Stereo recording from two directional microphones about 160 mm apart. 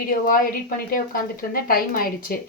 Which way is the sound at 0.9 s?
60° left (ahead or behind).